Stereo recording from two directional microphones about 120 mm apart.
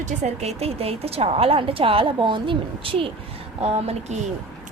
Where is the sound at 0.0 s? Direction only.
70° right (ahead or behind); by 3.1 s 50° right (ahead or behind).